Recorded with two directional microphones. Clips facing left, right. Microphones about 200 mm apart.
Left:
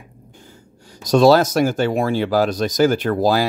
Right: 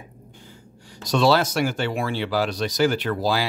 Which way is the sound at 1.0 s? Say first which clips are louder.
Left 7 dB; 45° left (ahead or behind).